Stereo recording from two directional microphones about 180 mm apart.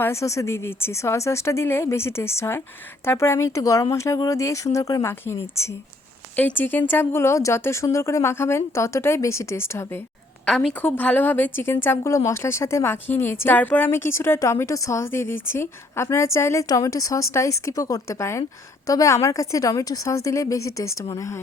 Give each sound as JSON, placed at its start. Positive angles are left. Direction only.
{"t": 0.0, "sound": "speech", "side_deg": 15}
{"t": 10.4, "sound": "a woman's voice", "side_deg": 0}